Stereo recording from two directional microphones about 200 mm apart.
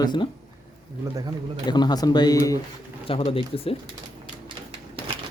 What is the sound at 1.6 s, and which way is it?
Speech, 20° left (ahead or behind).